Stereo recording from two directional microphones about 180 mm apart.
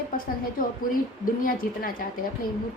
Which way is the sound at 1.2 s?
55° left (ahead or behind).